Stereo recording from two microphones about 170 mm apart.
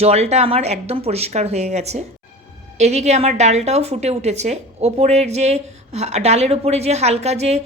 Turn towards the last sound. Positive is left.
turn(degrees=-40)  # may be behind; listen again after turning